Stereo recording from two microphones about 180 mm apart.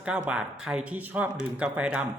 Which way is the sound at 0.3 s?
5° right (ahead or behind).